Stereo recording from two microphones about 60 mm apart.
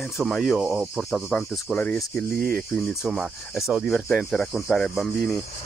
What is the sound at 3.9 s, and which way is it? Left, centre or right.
Speech, centre.